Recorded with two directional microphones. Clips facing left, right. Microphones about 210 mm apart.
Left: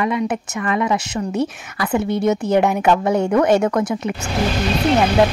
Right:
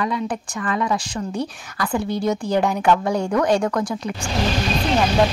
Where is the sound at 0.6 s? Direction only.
10° left (ahead or behind).